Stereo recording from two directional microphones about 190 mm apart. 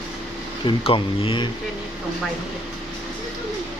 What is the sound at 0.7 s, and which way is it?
Speech, 30° left (ahead or behind).